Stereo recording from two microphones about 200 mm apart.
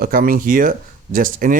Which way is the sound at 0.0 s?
45° right (ahead or behind).